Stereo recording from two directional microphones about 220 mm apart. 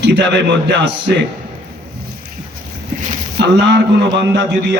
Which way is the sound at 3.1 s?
50° right (ahead or behind).